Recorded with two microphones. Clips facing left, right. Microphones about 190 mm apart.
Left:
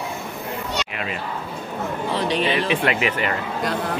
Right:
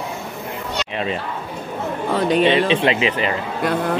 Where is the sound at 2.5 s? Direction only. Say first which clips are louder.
Right 5 dB; 25° right (ahead or behind).